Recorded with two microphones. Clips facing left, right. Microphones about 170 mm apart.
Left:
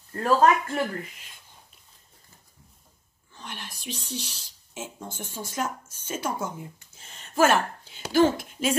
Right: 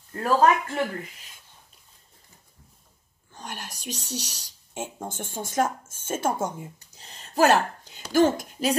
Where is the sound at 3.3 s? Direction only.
45° right (ahead or behind).